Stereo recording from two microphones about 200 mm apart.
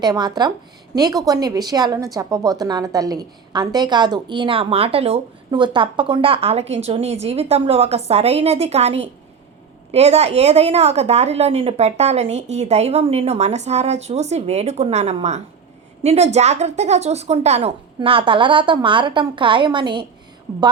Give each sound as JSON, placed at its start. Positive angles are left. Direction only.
{"t": 0.0, "sound": "a woman's voice", "side_deg": -20}